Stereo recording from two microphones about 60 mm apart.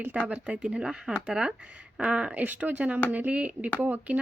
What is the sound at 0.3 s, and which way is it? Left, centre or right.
A woman's voice, centre.